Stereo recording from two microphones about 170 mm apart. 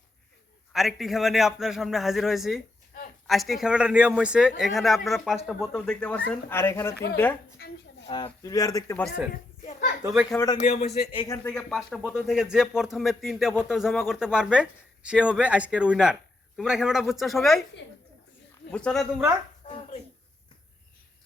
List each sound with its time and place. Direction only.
0.7 s speech: centre (ahead or behind); by 6.9 s 15° left (ahead or behind)
8.1 s speech: 25° left (ahead or behind)
10.2 s speech: 20° left (ahead or behind)
10.6 s speech: 40° left (ahead or behind)
10.8 s speech: 70° left (ahead or behind)
11.3 s speech: 5° left (ahead or behind)
18.7 s speech: 5° left (ahead or behind)
19.6 s a sound: 30° left (ahead or behind)